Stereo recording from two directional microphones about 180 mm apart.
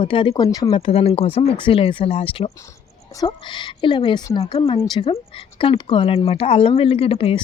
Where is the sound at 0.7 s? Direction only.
30° left (ahead or behind).